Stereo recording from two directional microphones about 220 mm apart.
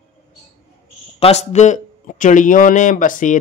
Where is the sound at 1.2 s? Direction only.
30° left (ahead or behind).